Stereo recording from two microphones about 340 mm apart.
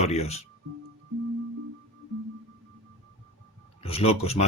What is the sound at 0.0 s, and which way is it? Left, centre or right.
Speech, centre.